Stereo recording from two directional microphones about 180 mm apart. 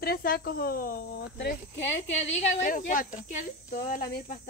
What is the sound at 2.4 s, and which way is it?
Cricket, 45° left (ahead or behind).